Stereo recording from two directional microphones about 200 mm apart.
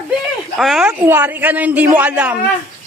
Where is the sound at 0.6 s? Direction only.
Centre (ahead or behind).